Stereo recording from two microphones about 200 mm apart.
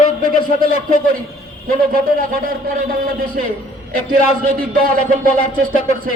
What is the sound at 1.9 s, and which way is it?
A man's voice, 45° right (ahead or behind).